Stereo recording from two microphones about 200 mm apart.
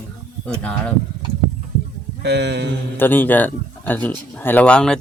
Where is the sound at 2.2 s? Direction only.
60° right (ahead or behind).